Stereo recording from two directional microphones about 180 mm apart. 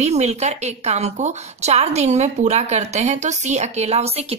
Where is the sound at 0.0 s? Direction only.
40° right (ahead or behind).